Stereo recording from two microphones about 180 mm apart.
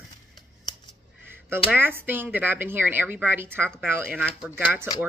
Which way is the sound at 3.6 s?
5° left (ahead or behind).